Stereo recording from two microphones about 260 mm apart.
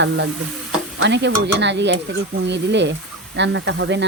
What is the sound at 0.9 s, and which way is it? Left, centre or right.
Speech, right.